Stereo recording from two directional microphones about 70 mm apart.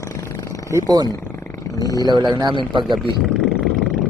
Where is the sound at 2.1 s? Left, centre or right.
Right.